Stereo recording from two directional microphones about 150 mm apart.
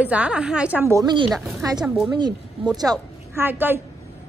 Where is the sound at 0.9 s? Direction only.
25° right (ahead or behind).